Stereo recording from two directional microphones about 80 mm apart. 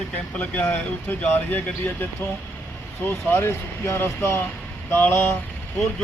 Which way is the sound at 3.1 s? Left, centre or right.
Left.